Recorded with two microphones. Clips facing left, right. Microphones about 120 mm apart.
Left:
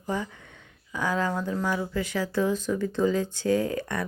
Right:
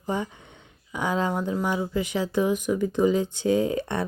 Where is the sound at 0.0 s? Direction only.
20° right (ahead or behind).